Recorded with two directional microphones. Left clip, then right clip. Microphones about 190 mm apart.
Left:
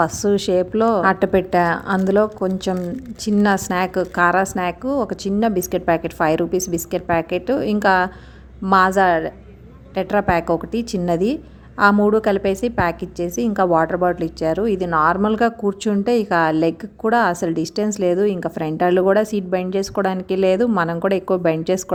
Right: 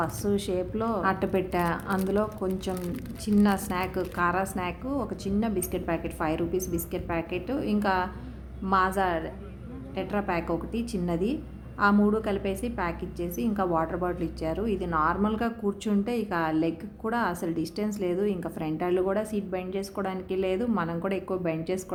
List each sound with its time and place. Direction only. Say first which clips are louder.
0.0 s a woman's voice: left 11 dB; 45° left (ahead or behind)